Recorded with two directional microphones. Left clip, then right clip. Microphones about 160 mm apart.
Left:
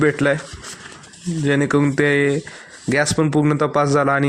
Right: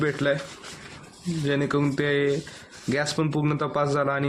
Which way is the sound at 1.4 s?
40° left (ahead or behind).